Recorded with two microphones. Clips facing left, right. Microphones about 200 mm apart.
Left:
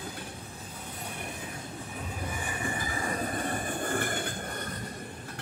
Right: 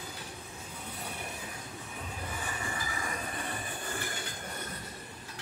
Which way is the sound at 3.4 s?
50° left (ahead or behind).